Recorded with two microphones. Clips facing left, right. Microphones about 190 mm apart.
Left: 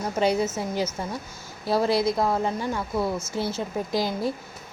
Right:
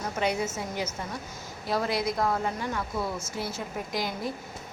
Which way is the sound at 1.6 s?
30° left (ahead or behind).